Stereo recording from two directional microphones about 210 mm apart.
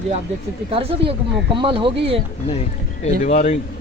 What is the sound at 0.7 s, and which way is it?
Speech, 25° right (ahead or behind).